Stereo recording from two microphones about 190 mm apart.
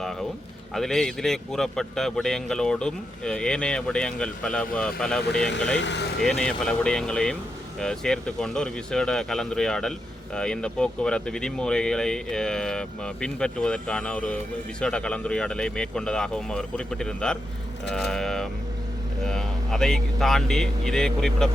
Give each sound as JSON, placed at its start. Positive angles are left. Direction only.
{"t": 0.7, "sound": "speech", "side_deg": 0}
{"t": 5.5, "sound": "speech", "side_deg": 70}
{"t": 6.2, "sound": "speech", "side_deg": 5}